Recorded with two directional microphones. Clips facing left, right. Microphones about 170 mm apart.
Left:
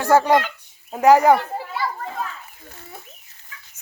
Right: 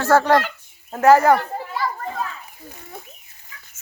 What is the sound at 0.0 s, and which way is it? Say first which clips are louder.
A child's voice: even; 15° left (ahead or behind).